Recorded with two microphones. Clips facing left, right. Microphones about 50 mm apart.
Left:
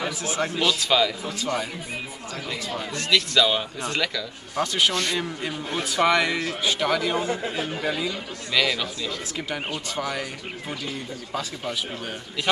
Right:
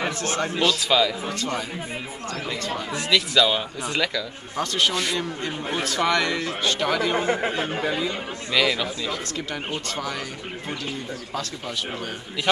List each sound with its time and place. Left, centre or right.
0.2 s speech: centre
2.9 s speech: centre
7.2 s speech: right
7.8 s speech: centre
9.8 s speech: centre